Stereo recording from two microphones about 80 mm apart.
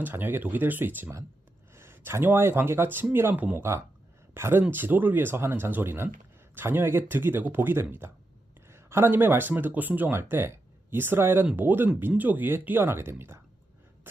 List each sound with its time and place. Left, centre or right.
0.0 s speech: right
4.4 s speech: right